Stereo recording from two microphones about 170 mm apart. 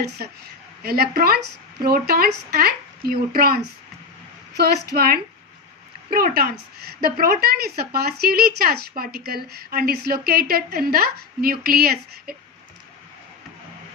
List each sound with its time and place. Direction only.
0.8 s a woman's voice: 65° right (ahead or behind)